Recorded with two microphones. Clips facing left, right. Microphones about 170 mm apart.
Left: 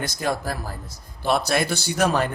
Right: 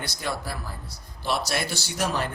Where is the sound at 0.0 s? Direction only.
45° left (ahead or behind).